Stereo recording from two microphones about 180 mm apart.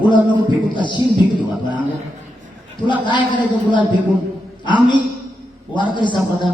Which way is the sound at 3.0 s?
25° left (ahead or behind).